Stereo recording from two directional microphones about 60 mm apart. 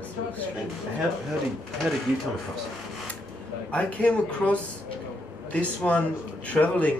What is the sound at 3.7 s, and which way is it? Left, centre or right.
Speech, left.